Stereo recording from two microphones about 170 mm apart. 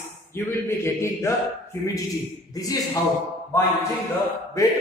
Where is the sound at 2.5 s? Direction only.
20° left (ahead or behind).